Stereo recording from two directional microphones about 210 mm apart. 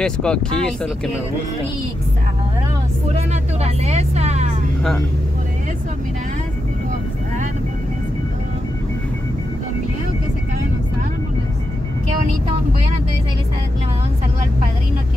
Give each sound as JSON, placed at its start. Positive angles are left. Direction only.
{"t": 0.0, "sound": "speech", "side_deg": 5}
{"t": 3.6, "sound": "vehicle", "side_deg": -30}